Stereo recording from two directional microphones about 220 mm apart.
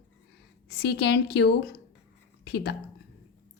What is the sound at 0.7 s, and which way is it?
A woman's voice, 50° left (ahead or behind).